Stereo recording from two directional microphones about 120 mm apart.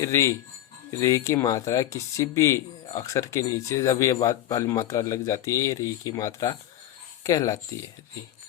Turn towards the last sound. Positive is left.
turn(degrees=25)  # may be behind; listen again after turning